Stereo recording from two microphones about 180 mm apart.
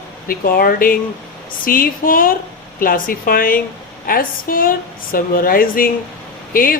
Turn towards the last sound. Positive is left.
turn(degrees=50)  # may be behind; listen again after turning